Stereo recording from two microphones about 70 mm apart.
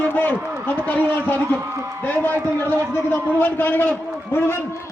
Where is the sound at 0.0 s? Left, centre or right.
Left.